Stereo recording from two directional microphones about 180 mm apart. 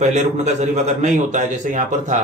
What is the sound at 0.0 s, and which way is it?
A man's voice, 40° right (ahead or behind).